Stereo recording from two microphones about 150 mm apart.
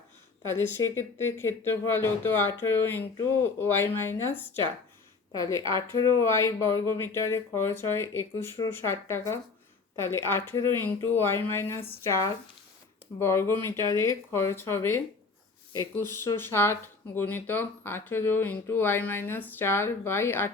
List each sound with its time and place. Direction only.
0.4 s speech: 15° left (ahead or behind)